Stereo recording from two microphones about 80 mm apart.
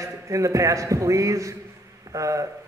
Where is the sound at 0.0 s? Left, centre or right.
Right.